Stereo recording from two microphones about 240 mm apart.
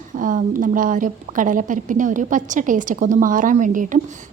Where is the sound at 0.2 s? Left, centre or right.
Right.